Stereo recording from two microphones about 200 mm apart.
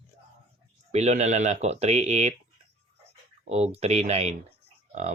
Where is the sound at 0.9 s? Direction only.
35° right (ahead or behind).